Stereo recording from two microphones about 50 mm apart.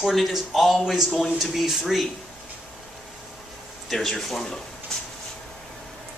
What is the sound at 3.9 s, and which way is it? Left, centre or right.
Speech, centre.